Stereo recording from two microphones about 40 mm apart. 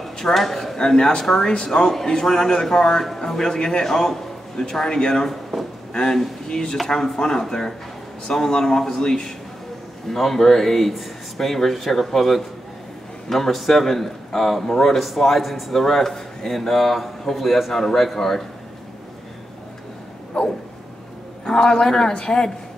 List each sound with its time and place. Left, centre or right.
0.0 s a sound: centre
0.8 s a man's voice: centre
5.3 s speech: centre
6.5 s a man's voice: centre
20.4 s a sound: left
21.5 s a man's voice: centre